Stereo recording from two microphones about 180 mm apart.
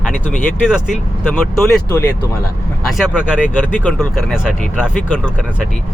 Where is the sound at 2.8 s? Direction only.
Centre (ahead or behind).